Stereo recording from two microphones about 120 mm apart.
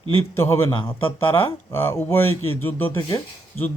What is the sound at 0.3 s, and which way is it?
A man's voice, 20° left (ahead or behind).